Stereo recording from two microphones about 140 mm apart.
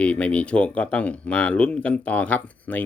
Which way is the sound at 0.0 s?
10° left (ahead or behind).